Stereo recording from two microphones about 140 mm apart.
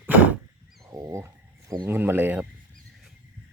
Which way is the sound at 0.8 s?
25° right (ahead or behind).